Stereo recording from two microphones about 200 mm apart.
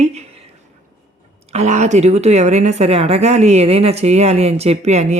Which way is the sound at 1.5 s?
35° right (ahead or behind).